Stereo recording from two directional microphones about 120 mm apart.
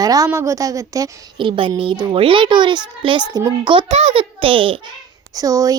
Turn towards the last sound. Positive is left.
turn(degrees=-30)  # may be behind; listen again after turning